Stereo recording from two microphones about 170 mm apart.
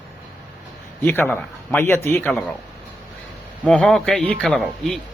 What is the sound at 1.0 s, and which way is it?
Speech, 10° left (ahead or behind).